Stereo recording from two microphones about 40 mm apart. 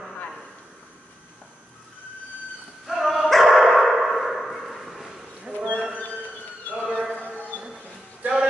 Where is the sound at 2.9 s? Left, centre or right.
Centre.